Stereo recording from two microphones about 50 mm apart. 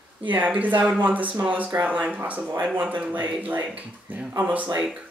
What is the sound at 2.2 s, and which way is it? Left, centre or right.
Speech, right.